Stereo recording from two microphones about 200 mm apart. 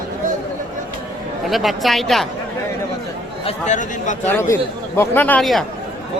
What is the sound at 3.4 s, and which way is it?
Speech, 35° left (ahead or behind).